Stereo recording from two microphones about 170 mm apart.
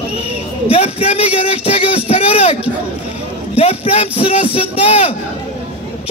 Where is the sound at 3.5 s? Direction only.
35° left (ahead or behind).